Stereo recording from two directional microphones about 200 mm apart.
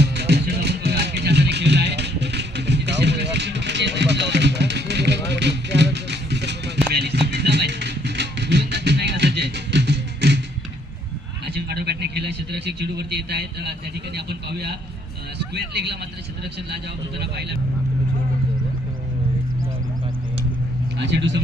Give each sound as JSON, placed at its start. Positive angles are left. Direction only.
{"t": 0.0, "sound": "music", "side_deg": -55}
{"t": 11.4, "sound": "a sound", "side_deg": -55}
{"t": 15.5, "sound": "speech", "side_deg": -55}
{"t": 21.0, "sound": "speech", "side_deg": -60}